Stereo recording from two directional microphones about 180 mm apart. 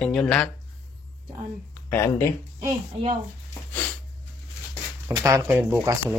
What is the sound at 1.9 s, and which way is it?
Speech, 15° left (ahead or behind).